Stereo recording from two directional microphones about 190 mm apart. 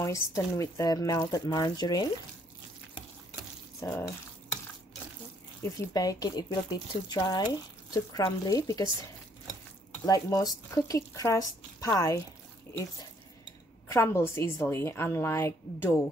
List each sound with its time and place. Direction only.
0.0 s speech: 15° left (ahead or behind)
5.6 s speech: 20° left (ahead or behind)
10.0 s speech: 20° left (ahead or behind)
13.8 s speech: 15° left (ahead or behind)